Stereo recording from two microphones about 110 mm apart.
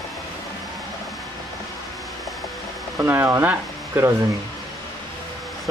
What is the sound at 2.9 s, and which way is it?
Speech, 20° right (ahead or behind).